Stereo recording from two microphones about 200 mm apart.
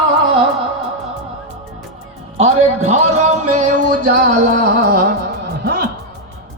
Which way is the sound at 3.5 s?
40° right (ahead or behind).